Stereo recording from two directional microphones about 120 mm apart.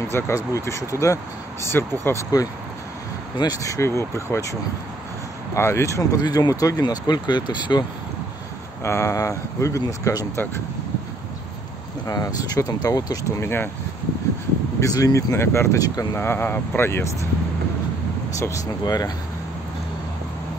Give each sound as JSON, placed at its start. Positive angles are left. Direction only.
{"t": 0.1, "sound": "speech", "side_deg": 25}
{"t": 8.8, "sound": "speech", "side_deg": 25}
{"t": 12.1, "sound": "speech", "side_deg": 30}
{"t": 14.8, "sound": "speech", "side_deg": 30}
{"t": 18.4, "sound": "speech", "side_deg": 30}